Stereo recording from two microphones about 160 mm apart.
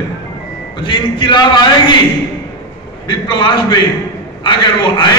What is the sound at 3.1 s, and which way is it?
A man's voice, 30° left (ahead or behind).